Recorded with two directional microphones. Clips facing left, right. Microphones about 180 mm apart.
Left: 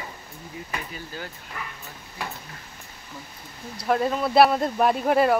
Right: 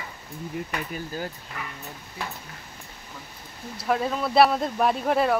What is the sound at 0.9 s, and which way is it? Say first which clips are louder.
Speech: right 5 dB; 40° right (ahead or behind).